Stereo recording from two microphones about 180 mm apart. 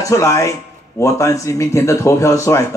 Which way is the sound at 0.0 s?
15° left (ahead or behind).